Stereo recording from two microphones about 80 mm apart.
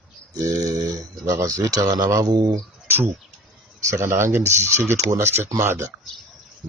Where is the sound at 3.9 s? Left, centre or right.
Right.